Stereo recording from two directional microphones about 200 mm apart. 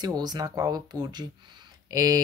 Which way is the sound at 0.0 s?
20° right (ahead or behind).